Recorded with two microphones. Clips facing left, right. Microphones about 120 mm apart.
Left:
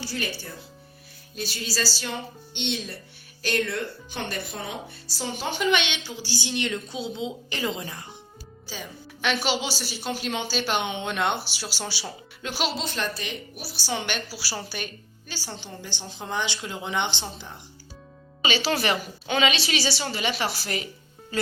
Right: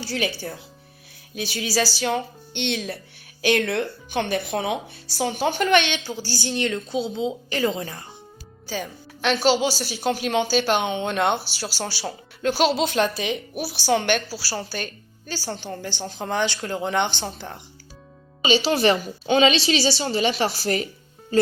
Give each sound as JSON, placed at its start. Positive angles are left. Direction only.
{"t": 0.1, "sound": "speech", "side_deg": -85}
{"t": 1.4, "sound": "speech", "side_deg": -60}
{"t": 2.6, "sound": "a woman's voice", "side_deg": -80}
{"t": 9.2, "sound": "a woman's voice", "side_deg": -35}
{"t": 13.7, "sound": "speech", "side_deg": -55}
{"t": 14.3, "sound": "a woman's voice", "side_deg": -35}
{"t": 18.4, "sound": "a woman's voice", "side_deg": -20}